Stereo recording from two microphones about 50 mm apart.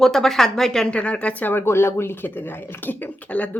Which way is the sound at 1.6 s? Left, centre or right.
Left.